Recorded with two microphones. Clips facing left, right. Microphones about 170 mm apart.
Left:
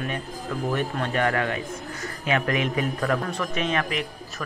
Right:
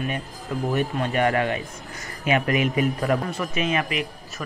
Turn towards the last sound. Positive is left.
turn(degrees=-5)  # may be behind; listen again after turning